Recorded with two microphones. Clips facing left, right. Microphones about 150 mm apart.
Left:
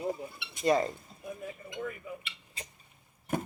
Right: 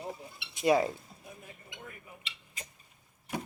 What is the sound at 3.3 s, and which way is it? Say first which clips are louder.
Chop: left 5 dB; 50° left (ahead or behind).